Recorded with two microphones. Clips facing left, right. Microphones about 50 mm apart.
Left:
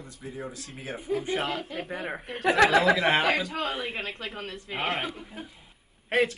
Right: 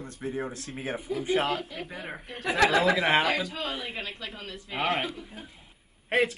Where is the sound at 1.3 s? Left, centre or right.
Right.